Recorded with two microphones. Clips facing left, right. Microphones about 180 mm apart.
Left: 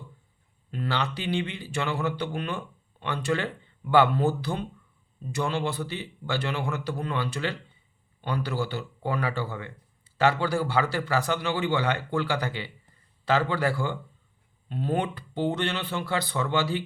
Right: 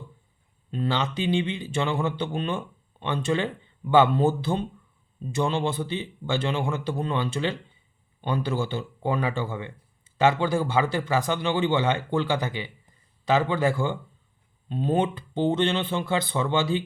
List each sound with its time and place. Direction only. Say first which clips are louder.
0.7 s speech: right 3 dB; 20° right (ahead or behind)